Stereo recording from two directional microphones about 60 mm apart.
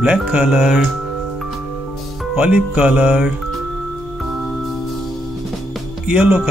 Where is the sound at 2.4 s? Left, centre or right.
Right.